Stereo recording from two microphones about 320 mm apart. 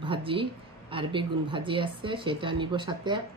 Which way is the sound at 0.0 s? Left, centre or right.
Centre.